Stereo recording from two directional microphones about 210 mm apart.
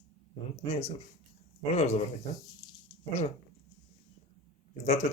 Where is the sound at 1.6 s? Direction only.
30° left (ahead or behind).